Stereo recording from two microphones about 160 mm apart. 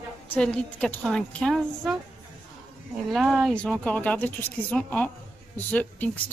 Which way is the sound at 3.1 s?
Centre (ahead or behind).